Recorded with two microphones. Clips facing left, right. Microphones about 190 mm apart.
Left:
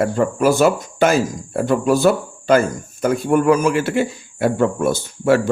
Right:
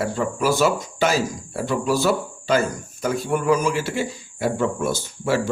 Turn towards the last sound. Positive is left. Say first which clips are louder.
# left 7 dB
turn(degrees=55)  # may be behind; listen again after turning